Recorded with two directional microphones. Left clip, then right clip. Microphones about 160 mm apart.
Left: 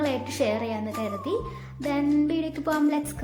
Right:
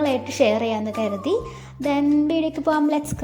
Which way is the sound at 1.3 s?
35° right (ahead or behind).